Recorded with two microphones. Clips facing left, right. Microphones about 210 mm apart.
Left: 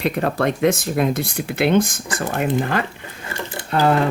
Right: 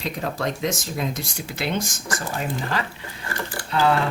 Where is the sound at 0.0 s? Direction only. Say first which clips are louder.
Left 7 dB; 60° left (ahead or behind).